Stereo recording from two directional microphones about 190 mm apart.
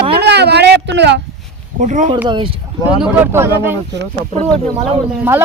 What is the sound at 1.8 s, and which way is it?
Speech, 40° right (ahead or behind).